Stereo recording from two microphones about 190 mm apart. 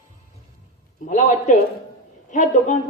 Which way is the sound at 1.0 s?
40° left (ahead or behind).